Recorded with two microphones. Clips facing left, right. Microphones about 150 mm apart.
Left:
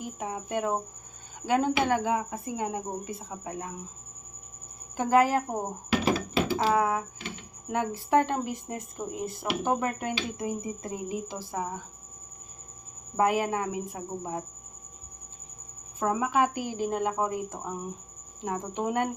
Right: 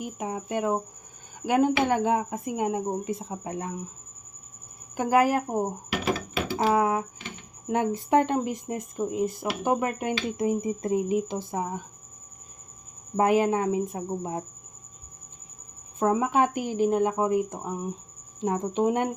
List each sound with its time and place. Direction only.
0.0 s speech: 15° right (ahead or behind)
4.9 s speech: 10° right (ahead or behind)
6.7 s speech: 20° right (ahead or behind)
13.1 s speech: 20° right (ahead or behind)
16.0 s speech: 25° right (ahead or behind)